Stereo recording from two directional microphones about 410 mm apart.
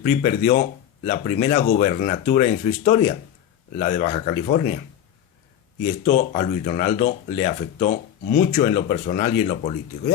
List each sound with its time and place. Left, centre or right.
0.0 s speech: centre
5.8 s speech: centre